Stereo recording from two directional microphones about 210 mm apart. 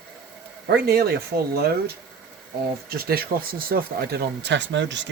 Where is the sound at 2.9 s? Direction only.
45° right (ahead or behind).